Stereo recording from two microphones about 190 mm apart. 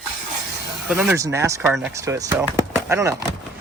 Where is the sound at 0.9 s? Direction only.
10° right (ahead or behind).